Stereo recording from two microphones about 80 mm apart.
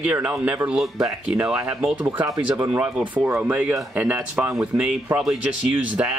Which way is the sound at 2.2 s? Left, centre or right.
Right.